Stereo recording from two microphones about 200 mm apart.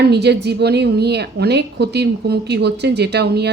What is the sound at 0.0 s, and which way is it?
A woman's voice, 55° right (ahead or behind).